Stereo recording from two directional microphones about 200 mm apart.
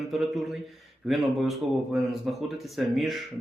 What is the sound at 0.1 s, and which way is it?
A man's voice, centre (ahead or behind).